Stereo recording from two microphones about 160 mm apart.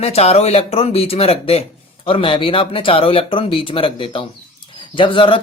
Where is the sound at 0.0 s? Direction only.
40° left (ahead or behind).